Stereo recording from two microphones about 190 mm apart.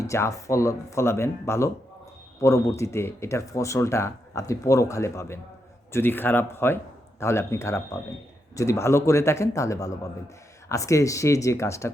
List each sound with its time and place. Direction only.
0.0 s speech: 15° left (ahead or behind)